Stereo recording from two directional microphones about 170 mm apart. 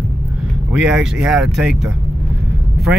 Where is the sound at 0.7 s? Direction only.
5° right (ahead or behind).